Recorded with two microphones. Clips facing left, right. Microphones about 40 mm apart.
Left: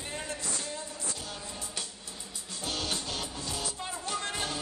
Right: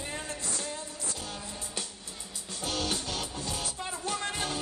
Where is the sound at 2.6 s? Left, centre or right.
Right.